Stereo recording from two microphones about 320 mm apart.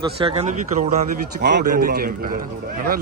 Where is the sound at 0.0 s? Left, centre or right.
Centre.